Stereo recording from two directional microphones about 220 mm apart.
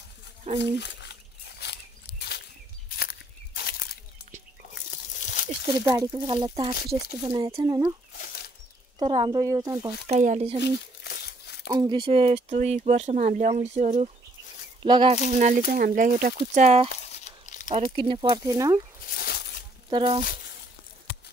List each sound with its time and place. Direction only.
0.6 s speech: 50° left (ahead or behind)
1.6 s a sound: 50° left (ahead or behind)
3.0 s walk: 45° left (ahead or behind)
5.2 s a sound: 35° left (ahead or behind)
5.9 s speech: 15° right (ahead or behind)
9.0 s speech: 25° right (ahead or behind)
10.0 s speech: 30° right (ahead or behind)
10.6 s crumpling: 50° left (ahead or behind)
11.7 s speech: 20° right (ahead or behind)
15.2 s speech: 35° right (ahead or behind)
17.1 s a sound: 30° left (ahead or behind)
17.7 s speech: 25° right (ahead or behind)
19.0 s a sound: 45° left (ahead or behind)
19.9 s speech: 20° right (ahead or behind)